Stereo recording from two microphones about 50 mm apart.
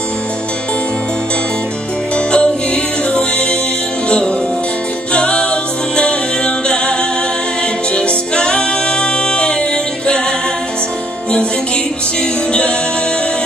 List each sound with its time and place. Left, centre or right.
2.1 s music: centre
5.1 s music: centre
7.9 s music: centre